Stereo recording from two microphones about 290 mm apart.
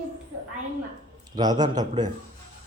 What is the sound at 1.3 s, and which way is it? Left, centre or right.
Speech, centre.